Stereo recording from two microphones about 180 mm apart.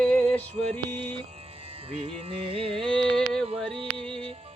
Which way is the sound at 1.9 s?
30° right (ahead or behind).